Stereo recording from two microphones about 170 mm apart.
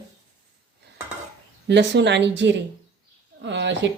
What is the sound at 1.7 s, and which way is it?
Speech, 90° right.